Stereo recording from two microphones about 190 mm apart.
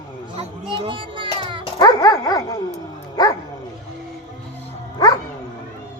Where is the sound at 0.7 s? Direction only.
30° right (ahead or behind).